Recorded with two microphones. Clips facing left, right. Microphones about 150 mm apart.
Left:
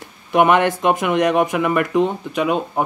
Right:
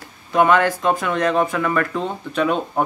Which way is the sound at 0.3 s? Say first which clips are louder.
Left 1 dB; 20° left (ahead or behind).